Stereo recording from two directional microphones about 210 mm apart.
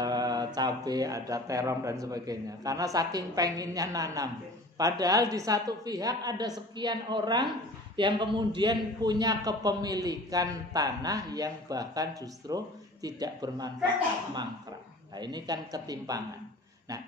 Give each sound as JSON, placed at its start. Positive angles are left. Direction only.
{"t": 0.0, "sound": "mantra", "side_deg": -20}
{"t": 0.6, "sound": "a man's voice", "side_deg": -20}
{"t": 15.1, "sound": "a man's voice", "side_deg": -20}